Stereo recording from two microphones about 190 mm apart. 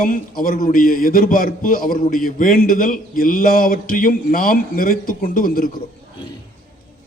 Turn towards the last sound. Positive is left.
turn(degrees=50)  # may be behind; listen again after turning